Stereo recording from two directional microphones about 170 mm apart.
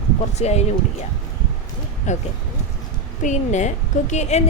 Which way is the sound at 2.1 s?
45° left (ahead or behind).